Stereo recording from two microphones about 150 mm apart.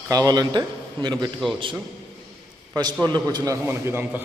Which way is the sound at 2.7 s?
25° right (ahead or behind).